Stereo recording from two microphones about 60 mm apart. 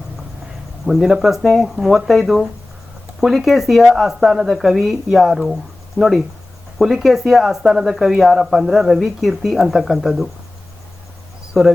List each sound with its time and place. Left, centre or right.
0.9 s speech: centre
6.0 s speech: left
6.7 s speech: centre
11.6 s speech: centre